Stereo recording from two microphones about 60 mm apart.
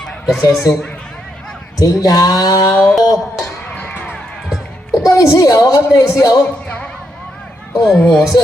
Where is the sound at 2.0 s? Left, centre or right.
Left.